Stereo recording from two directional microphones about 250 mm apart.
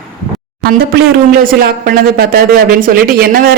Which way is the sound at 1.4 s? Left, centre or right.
Right.